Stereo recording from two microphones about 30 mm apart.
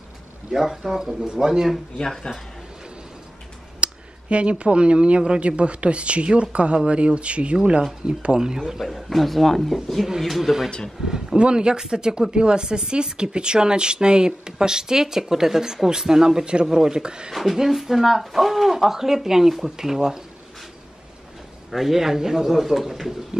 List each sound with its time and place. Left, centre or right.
0.5 s speech: centre
2.3 s speech: left
3.8 s a woman's voice: right
8.1 s a woman's voice: right
8.8 s a man's voice: centre
10.3 s speech: centre
11.1 s speech: centre
11.3 s speech: right
17.3 s speech: centre
21.6 s speech: centre